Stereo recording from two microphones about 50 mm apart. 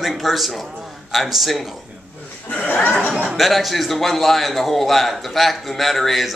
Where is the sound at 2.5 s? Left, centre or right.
Left.